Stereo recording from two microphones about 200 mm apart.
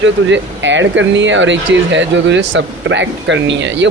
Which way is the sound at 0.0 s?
65° right (ahead or behind).